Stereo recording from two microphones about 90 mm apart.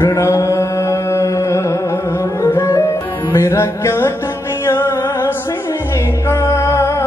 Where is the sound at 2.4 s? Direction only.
30° left (ahead or behind).